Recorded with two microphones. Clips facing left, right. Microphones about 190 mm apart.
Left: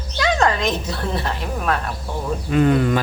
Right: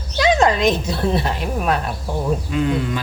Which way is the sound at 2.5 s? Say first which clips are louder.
Left 4 dB; 55° left (ahead or behind).